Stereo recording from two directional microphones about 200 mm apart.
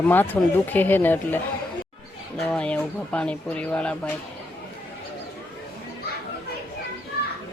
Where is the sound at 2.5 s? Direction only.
5° left (ahead or behind).